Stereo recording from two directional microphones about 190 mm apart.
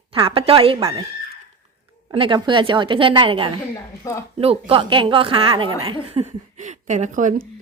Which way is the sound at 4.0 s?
15° left (ahead or behind).